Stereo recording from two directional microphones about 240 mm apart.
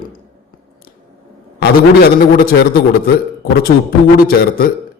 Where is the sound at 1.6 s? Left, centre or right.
Left.